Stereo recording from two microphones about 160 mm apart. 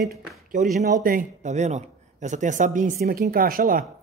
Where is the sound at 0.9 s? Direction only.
55° right (ahead or behind).